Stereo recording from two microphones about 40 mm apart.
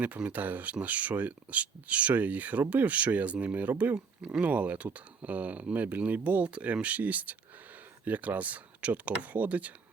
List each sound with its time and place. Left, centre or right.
0.3 s speech: right